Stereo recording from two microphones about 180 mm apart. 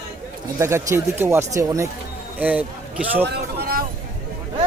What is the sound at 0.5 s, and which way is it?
A man's voice, 15° right (ahead or behind).